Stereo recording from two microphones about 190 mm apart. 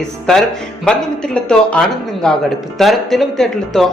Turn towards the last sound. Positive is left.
turn(degrees=0)  # may be behind; listen again after turning